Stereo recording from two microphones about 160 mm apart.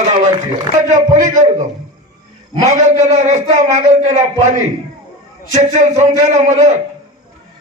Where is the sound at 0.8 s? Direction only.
50° right (ahead or behind).